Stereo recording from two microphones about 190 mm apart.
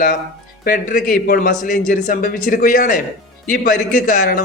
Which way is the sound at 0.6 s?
50° left (ahead or behind).